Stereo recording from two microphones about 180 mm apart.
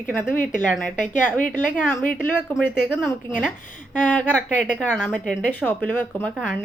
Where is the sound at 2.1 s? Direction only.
Centre (ahead or behind).